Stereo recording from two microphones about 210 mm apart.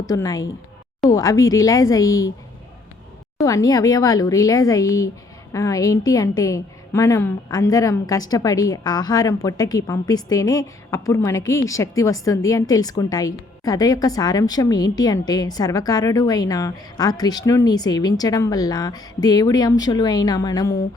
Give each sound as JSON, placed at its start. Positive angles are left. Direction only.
{"t": 0.0, "sound": "a woman's voice", "side_deg": 15}
{"t": 3.4, "sound": "a woman's voice", "side_deg": 15}